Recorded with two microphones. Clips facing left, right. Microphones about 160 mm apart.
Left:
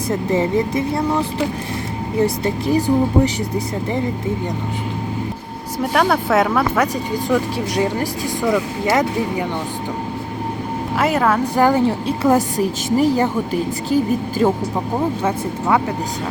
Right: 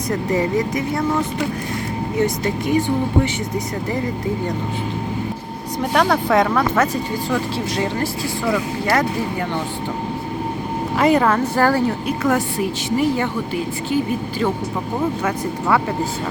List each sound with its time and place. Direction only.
0.1 s a woman's voice: 25° left (ahead or behind)
5.8 s speech: 5° left (ahead or behind)
10.9 s speech: 5° left (ahead or behind)
11.5 s speech: 15° left (ahead or behind)
11.9 s a woman's voice: 30° left (ahead or behind)
15.2 s speech: 20° left (ahead or behind)